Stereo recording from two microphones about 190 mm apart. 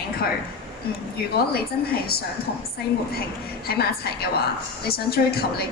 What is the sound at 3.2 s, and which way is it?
A woman's voice, 55° left (ahead or behind).